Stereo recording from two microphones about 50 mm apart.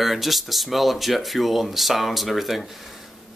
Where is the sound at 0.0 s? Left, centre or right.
Centre.